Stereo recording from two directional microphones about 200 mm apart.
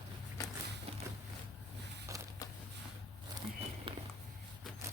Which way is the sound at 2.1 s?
15° right (ahead or behind).